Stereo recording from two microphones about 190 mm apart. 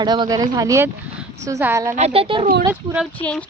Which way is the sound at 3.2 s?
5° left (ahead or behind).